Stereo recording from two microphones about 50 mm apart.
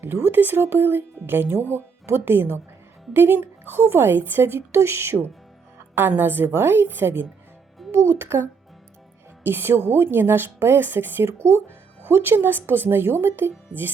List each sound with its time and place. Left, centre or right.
0.0 s speech: right
5.9 s speech: right
7.9 s speech: right
11.3 s speech: right
12.0 s speech: right